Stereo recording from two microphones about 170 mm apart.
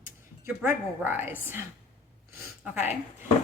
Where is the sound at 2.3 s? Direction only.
10° right (ahead or behind).